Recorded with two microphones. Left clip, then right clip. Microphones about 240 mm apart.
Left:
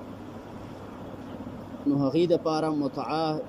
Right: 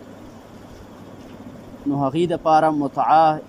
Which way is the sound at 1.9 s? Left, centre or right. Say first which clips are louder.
Right 3 dB; right.